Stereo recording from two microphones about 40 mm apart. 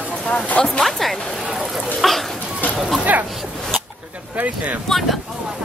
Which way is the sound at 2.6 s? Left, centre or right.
Left.